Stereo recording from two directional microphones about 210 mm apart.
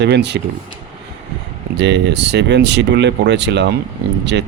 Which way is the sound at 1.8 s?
55° right (ahead or behind).